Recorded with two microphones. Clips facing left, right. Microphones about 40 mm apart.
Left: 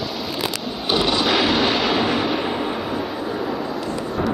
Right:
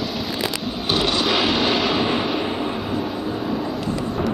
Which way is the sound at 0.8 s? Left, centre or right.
Left.